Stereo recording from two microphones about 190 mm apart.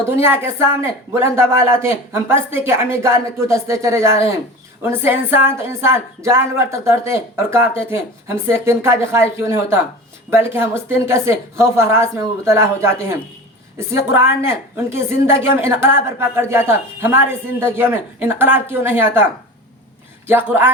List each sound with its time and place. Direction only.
0.2 s speech: 10° right (ahead or behind)
20.2 s speech: 10° right (ahead or behind)